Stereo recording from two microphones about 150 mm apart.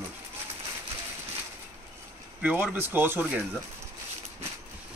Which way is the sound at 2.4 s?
10° right (ahead or behind).